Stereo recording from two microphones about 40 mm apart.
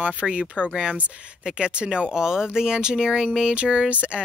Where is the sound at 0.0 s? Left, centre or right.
Right.